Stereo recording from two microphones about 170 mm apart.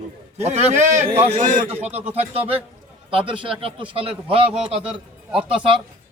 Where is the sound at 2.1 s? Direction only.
35° right (ahead or behind).